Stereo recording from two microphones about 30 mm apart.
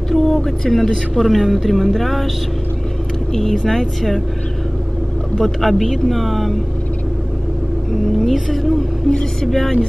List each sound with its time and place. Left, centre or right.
0.1 s speech: centre
3.3 s speech: centre
5.4 s speech: centre
8.3 s speech: centre
9.1 s speech: left
9.5 s speech: centre